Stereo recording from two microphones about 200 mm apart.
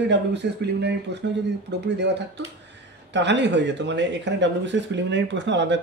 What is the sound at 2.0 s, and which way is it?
Speech, 60° right (ahead or behind).